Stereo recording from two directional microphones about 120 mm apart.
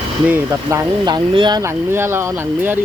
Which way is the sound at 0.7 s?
25° right (ahead or behind).